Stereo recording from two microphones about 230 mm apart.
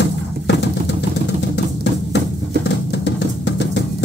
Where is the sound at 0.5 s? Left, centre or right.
Left.